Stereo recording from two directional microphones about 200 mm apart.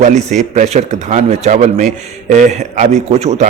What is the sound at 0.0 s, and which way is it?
A man's voice, 35° right (ahead or behind).